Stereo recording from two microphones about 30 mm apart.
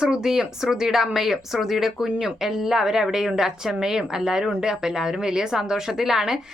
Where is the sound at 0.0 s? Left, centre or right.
Right.